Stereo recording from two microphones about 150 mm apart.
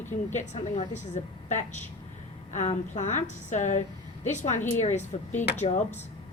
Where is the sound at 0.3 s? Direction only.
50° left (ahead or behind).